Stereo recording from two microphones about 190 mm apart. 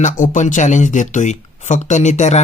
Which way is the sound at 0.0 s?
40° left (ahead or behind).